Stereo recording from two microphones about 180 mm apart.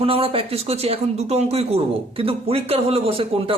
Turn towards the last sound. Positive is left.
turn(degrees=-30)  # may be behind; listen again after turning